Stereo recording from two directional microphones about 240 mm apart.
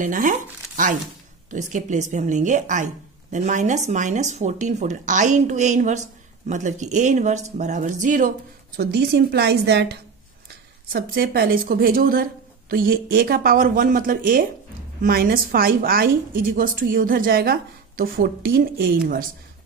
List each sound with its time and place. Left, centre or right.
0.0 s speech: right
8.7 s a woman's voice: right
10.9 s speech: right